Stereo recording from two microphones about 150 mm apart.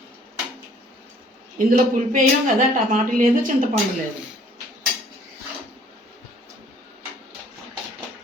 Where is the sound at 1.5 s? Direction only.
60° right (ahead or behind).